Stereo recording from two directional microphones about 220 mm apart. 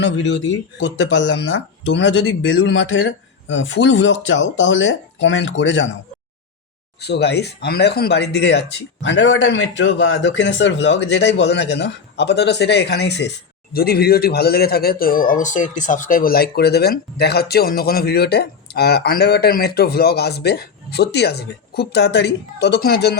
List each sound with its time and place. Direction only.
0.0 s speech: 55° left (ahead or behind)
7.0 s speech: 50° left (ahead or behind)